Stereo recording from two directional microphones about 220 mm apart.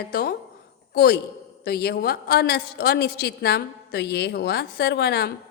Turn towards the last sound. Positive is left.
turn(degrees=45)  # may be behind; listen again after turning